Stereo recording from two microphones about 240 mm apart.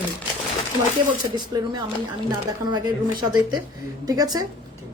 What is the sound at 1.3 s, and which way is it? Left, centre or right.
A woman's voice, centre.